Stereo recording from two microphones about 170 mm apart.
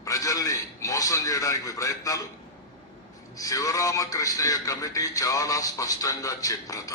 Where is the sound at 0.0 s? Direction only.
20° left (ahead or behind).